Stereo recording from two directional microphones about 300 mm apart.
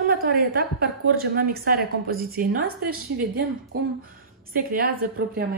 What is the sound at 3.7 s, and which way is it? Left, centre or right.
A woman's voice, right.